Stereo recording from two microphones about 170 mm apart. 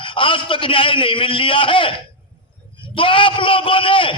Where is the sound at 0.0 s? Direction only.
30° left (ahead or behind).